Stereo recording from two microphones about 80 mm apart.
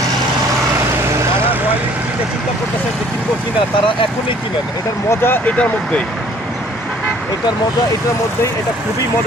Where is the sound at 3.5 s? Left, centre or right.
Left.